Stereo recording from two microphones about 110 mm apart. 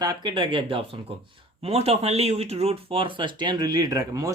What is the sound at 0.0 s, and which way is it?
Speech, 40° right (ahead or behind).